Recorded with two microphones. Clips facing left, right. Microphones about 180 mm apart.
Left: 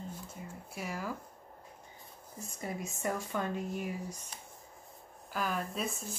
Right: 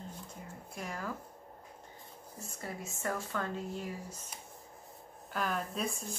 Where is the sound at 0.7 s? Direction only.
5° left (ahead or behind).